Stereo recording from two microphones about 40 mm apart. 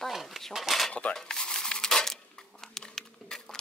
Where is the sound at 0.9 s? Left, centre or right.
Left.